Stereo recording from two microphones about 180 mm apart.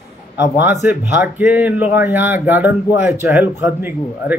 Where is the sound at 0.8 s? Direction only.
10° right (ahead or behind).